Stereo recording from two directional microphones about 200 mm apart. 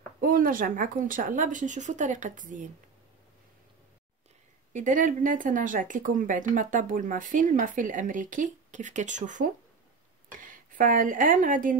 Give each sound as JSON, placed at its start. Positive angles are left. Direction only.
{"t": 0.2, "sound": "speech", "side_deg": -45}
{"t": 4.7, "sound": "speech", "side_deg": -40}